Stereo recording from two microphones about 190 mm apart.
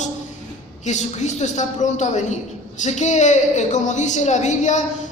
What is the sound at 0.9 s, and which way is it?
A woman's voice, 40° left (ahead or behind).